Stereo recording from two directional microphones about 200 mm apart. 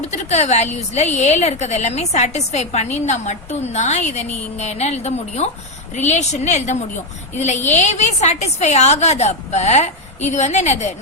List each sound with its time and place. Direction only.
0.0 s a woman's voice: 35° left (ahead or behind)